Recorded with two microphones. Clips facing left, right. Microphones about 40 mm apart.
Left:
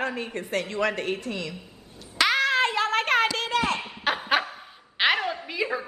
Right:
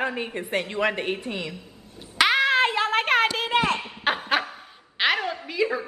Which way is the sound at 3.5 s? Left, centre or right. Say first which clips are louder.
Right 3 dB; right.